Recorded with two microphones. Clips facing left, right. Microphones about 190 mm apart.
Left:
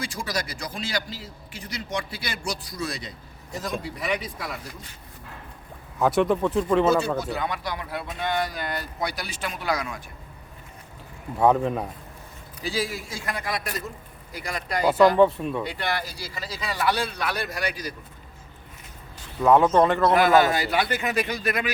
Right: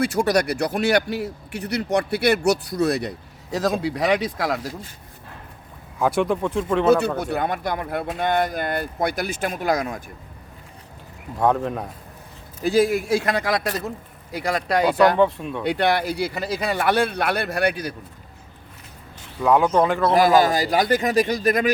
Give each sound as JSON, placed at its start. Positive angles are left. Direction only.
{"t": 0.0, "sound": "a man's voice", "side_deg": -65}
{"t": 6.0, "sound": "speech", "side_deg": 0}
{"t": 7.2, "sound": "speech", "side_deg": -55}
{"t": 11.3, "sound": "speech", "side_deg": 5}
{"t": 12.6, "sound": "speech", "side_deg": -55}
{"t": 14.3, "sound": "a man's voice", "side_deg": -70}
{"t": 15.2, "sound": "speech", "side_deg": 0}
{"t": 15.6, "sound": "speech", "side_deg": -65}
{"t": 19.4, "sound": "speech", "side_deg": 0}
{"t": 20.1, "sound": "a man's voice", "side_deg": -35}